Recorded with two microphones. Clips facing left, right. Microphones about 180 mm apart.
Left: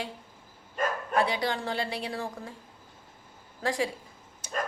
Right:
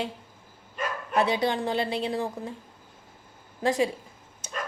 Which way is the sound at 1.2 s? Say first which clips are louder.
Right 4 dB; 20° right (ahead or behind).